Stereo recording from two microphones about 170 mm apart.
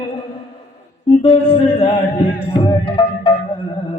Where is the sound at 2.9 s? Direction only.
30° left (ahead or behind).